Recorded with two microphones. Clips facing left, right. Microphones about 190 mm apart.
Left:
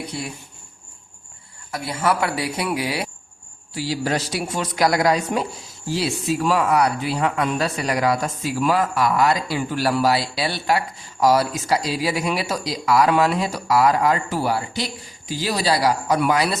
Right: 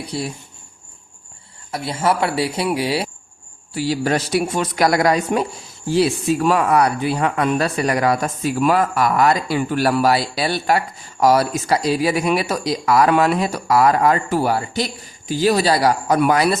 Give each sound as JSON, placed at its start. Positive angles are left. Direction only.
{"t": 0.1, "sound": "speech", "side_deg": -35}
{"t": 1.7, "sound": "speech", "side_deg": -25}
{"t": 3.8, "sound": "a woman's voice", "side_deg": -60}